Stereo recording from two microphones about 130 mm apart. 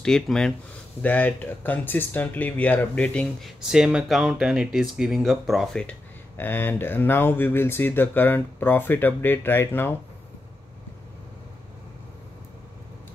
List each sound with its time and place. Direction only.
0.0 s speech: 5° left (ahead or behind)
3.6 s speech: 5° right (ahead or behind)
6.3 s speech: 15° left (ahead or behind)